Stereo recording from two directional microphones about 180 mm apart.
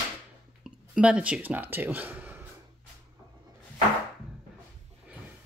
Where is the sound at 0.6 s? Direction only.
5° right (ahead or behind).